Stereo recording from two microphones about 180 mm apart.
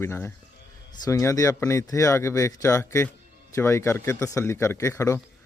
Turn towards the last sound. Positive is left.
turn(degrees=15)  # may be behind; listen again after turning